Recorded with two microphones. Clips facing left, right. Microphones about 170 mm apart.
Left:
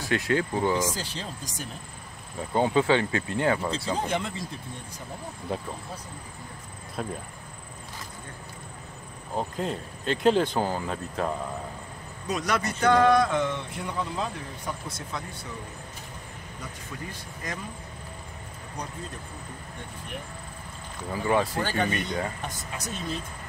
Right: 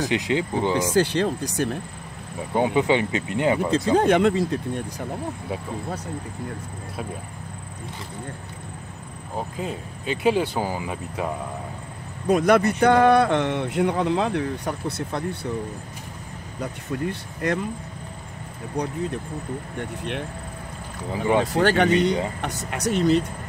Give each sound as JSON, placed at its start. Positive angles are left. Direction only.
{"t": 0.1, "sound": "speech", "side_deg": -20}
{"t": 0.9, "sound": "a man's voice", "side_deg": -65}
{"t": 2.5, "sound": "speech", "side_deg": -15}
{"t": 3.9, "sound": "speech", "side_deg": -65}
{"t": 9.4, "sound": "speech", "side_deg": -5}
{"t": 12.3, "sound": "a man's voice", "side_deg": -55}
{"t": 16.6, "sound": "a man's voice", "side_deg": -65}
{"t": 18.8, "sound": "speech", "side_deg": -65}
{"t": 19.8, "sound": "speech", "side_deg": -80}
{"t": 21.1, "sound": "speech", "side_deg": -20}
{"t": 21.5, "sound": "speech", "side_deg": -75}